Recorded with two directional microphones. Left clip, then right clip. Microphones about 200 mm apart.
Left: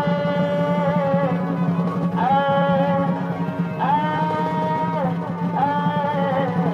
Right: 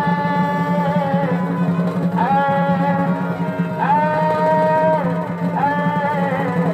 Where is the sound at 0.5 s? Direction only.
50° right (ahead or behind).